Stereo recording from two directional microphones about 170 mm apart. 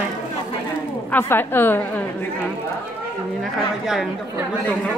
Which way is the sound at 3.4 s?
Centre (ahead or behind).